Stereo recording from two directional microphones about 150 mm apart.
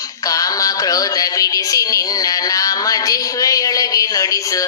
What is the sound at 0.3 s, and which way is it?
Synthetic singing, 25° left (ahead or behind).